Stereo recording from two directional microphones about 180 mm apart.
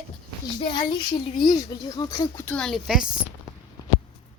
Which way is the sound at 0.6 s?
30° left (ahead or behind).